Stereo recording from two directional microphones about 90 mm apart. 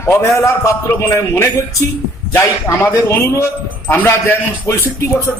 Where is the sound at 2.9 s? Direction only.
30° left (ahead or behind).